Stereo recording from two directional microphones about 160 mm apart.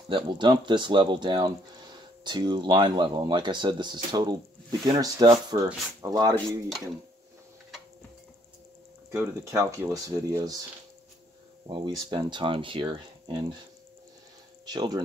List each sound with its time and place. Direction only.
0.1 s speech: 30° right (ahead or behind)
9.1 s speech: 15° right (ahead or behind)
11.6 s speech: 25° right (ahead or behind)
14.7 s speech: 25° right (ahead or behind)